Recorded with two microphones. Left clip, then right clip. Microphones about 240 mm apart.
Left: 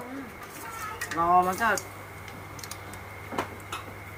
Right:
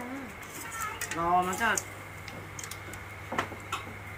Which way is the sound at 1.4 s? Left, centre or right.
Centre.